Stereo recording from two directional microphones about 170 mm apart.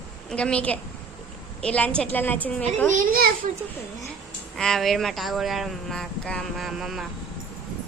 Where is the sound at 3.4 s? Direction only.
50° right (ahead or behind).